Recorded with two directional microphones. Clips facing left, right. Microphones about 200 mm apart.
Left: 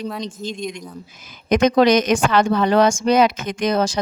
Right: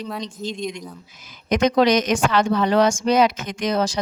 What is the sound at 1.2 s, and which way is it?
A woman's voice, 50° left (ahead or behind).